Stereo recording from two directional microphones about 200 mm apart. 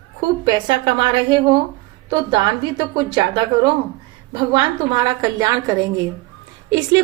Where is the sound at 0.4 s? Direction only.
25° right (ahead or behind).